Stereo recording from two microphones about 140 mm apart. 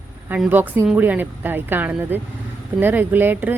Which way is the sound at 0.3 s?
10° right (ahead or behind).